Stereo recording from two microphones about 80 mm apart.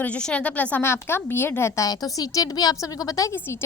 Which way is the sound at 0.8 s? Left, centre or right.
Left.